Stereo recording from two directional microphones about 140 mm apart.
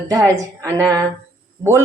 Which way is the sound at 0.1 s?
25° right (ahead or behind).